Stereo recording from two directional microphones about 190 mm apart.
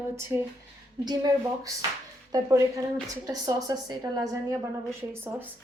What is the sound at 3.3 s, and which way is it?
A woman's voice, 20° right (ahead or behind).